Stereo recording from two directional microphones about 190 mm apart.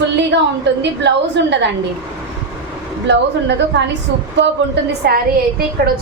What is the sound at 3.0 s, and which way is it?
Speech, 65° right (ahead or behind).